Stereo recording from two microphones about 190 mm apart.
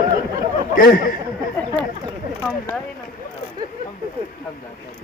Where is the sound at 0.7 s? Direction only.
45° left (ahead or behind).